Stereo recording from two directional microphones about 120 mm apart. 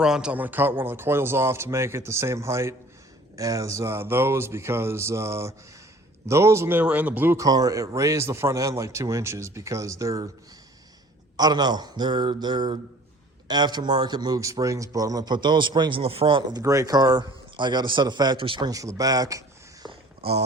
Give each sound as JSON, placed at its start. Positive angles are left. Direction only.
{"t": 0.0, "sound": "a man's voice", "side_deg": -5}
{"t": 7.4, "sound": "a man's voice", "side_deg": -30}
{"t": 11.3, "sound": "a man's voice", "side_deg": -35}
{"t": 16.5, "sound": "a man's voice", "side_deg": -30}
{"t": 18.7, "sound": "speech", "side_deg": -30}
{"t": 19.9, "sound": "a sound", "side_deg": -55}